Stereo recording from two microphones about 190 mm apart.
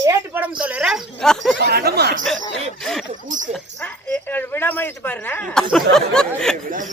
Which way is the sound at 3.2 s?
40° right (ahead or behind).